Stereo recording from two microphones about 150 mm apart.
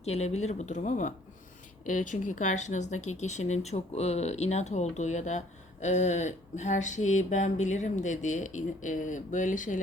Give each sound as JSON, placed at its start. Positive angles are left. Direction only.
{"t": 0.0, "sound": "speech", "side_deg": 45}